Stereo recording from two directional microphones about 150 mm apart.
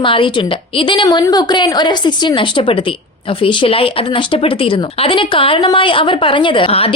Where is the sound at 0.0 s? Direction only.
35° left (ahead or behind).